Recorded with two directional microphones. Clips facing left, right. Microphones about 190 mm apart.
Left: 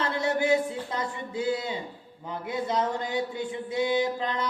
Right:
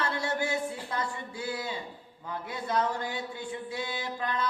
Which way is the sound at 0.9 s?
20° left (ahead or behind).